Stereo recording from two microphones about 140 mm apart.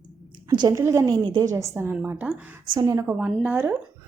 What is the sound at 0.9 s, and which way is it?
A woman's voice, 20° right (ahead or behind).